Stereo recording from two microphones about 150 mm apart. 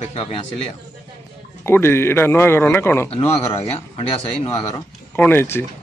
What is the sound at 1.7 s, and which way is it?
A man's voice, 15° left (ahead or behind).